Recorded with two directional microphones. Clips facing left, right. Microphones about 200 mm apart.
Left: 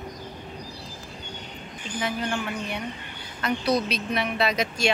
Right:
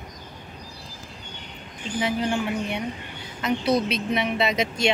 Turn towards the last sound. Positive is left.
turn(degrees=-20)  # may be behind; listen again after turning